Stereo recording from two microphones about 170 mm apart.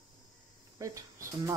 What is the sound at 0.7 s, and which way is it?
Cricket, 20° right (ahead or behind).